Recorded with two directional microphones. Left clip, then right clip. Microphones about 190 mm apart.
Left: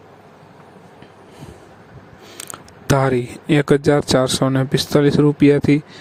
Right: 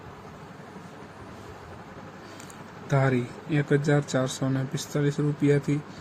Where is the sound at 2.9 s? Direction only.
60° left (ahead or behind).